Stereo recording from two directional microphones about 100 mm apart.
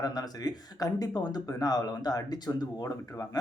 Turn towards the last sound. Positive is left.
turn(degrees=40)  # may be behind; listen again after turning